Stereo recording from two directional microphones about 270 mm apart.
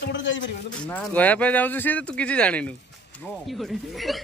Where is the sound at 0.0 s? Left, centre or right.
Left.